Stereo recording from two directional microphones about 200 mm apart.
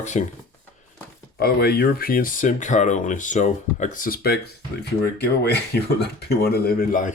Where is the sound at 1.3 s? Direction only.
50° left (ahead or behind).